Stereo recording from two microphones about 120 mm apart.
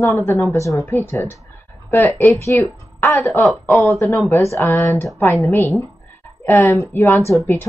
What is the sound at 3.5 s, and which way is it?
Speech, centre (ahead or behind).